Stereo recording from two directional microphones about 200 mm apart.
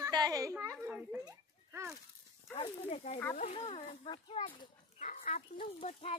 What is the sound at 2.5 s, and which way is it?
Speech, 35° left (ahead or behind).